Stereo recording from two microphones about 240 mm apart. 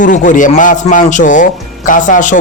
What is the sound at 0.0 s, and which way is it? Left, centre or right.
Music, left.